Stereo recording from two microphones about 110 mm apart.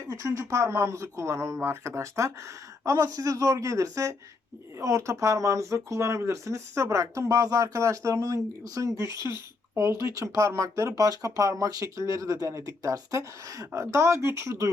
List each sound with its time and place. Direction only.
0.1 s speech: 25° right (ahead or behind)